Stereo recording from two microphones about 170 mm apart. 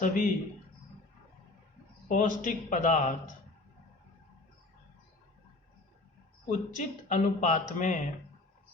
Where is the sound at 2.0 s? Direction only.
50° left (ahead or behind).